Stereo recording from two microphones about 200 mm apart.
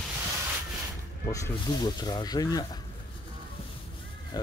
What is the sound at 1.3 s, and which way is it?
Speech, 20° left (ahead or behind).